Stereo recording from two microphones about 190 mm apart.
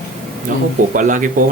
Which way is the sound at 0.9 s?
45° right (ahead or behind).